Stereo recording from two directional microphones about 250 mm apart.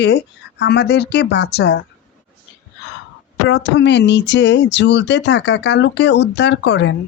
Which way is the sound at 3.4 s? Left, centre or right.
Left.